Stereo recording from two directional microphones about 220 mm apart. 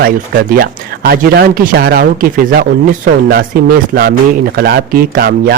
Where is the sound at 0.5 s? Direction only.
40° right (ahead or behind).